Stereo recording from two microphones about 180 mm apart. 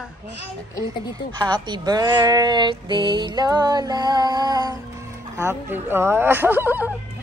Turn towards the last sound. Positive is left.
turn(degrees=-10)  # may be behind; listen again after turning